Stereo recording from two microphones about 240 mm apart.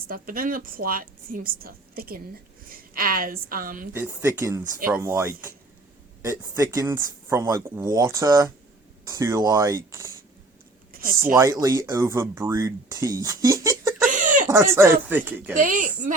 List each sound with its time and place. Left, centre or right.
0.1 s a woman's voice: right
3.9 s speech: centre
11.6 s speech: centre
14.1 s a sound: right
14.5 s speech: centre
15.5 s a woman's voice: right